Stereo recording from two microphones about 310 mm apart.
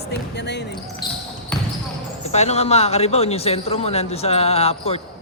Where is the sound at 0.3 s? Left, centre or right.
Left.